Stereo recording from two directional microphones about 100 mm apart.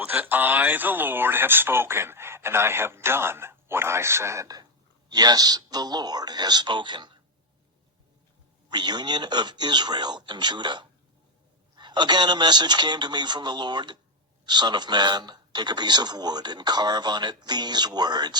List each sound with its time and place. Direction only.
0.0 s a man's voice: 15° right (ahead or behind); by 7.2 s 50° right (ahead or behind)
8.7 s a man's voice: 45° right (ahead or behind)